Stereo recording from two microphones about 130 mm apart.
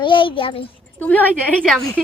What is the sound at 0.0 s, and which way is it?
Speech, 40° left (ahead or behind).